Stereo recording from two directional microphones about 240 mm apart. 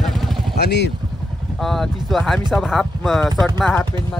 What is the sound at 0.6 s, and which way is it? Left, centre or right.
Speech, left.